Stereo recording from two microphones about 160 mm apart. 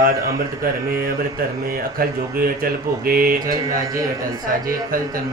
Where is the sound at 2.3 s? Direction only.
65° right (ahead or behind).